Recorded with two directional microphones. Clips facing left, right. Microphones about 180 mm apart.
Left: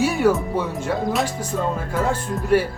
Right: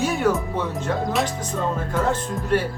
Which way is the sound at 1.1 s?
5° left (ahead or behind).